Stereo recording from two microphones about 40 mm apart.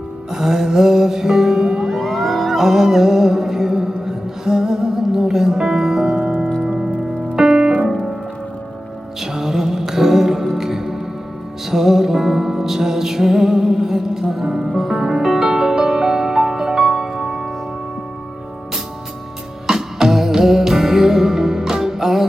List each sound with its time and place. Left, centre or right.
0.3 s music: centre
1.9 s music: centre
7.3 s piano: centre
7.6 s piano: right
9.2 s music: centre
19.6 s music: centre